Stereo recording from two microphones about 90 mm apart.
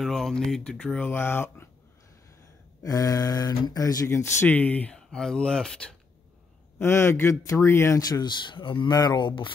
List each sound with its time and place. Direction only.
0.0 s speech: 5° left (ahead or behind); by 1.7 s 25° left (ahead or behind)
2.8 s speech: 40° left (ahead or behind)
4.5 s speech: 15° left (ahead or behind)
6.8 s speech: 30° left (ahead or behind)
8.0 s speech: 50° left (ahead or behind); by 8.9 s 70° left (ahead or behind)
8.9 s speech: 50° left (ahead or behind)